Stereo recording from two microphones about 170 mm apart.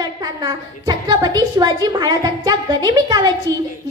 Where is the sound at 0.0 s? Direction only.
25° right (ahead or behind).